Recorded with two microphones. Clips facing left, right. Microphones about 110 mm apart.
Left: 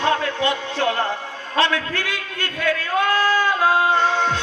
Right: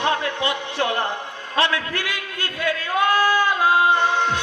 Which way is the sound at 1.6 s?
15° right (ahead or behind).